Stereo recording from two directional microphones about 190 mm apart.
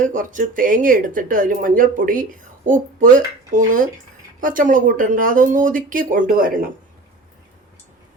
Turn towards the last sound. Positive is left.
turn(degrees=-45)  # may be behind; listen again after turning